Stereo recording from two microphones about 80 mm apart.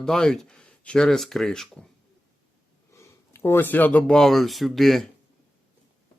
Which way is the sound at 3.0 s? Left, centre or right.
Left.